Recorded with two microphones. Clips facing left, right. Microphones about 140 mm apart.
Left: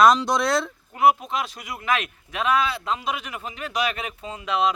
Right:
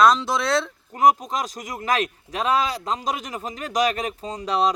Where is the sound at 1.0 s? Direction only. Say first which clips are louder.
Right 1 dB; 40° right (ahead or behind).